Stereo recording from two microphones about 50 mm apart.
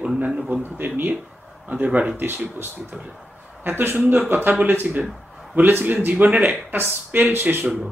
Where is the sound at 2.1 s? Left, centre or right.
Right.